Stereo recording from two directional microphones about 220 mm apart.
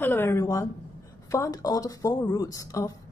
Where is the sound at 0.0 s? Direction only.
10° left (ahead or behind).